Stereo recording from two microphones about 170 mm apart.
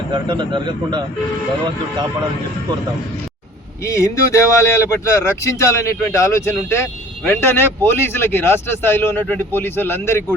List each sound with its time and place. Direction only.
0.1 s speech: 25° right (ahead or behind)
3.8 s speech: 20° left (ahead or behind)